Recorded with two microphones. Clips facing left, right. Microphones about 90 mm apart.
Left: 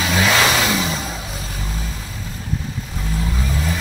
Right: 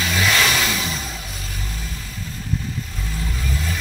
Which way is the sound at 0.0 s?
20° left (ahead or behind).